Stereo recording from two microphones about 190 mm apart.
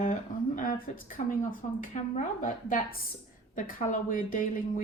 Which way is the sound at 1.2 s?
40° left (ahead or behind).